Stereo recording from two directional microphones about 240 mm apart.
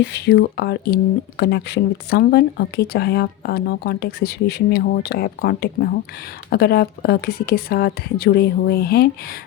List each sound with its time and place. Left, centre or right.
0.0 s speech: left